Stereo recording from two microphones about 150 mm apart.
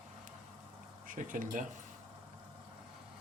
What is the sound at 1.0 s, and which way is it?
Speech, 65° right (ahead or behind).